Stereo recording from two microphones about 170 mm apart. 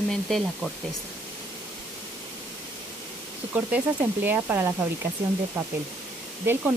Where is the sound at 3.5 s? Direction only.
10° right (ahead or behind).